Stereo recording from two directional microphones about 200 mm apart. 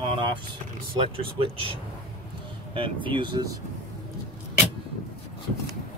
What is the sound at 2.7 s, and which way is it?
Speech, 25° right (ahead or behind).